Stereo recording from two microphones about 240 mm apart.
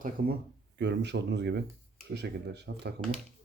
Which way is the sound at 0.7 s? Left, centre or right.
Right.